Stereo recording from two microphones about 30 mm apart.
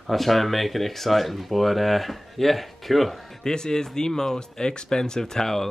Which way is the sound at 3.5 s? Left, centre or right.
Centre.